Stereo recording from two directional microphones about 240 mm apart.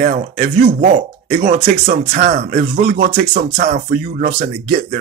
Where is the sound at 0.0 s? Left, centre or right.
Right.